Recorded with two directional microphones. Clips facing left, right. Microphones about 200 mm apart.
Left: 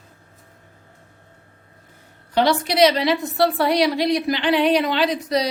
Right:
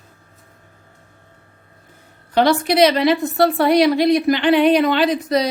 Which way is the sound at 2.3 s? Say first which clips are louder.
Right 3 dB; 50° right (ahead or behind).